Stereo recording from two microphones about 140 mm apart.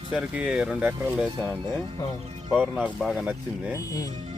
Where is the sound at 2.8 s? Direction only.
5° right (ahead or behind).